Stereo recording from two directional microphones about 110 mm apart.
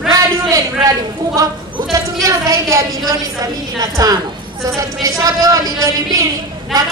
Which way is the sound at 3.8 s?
35° right (ahead or behind).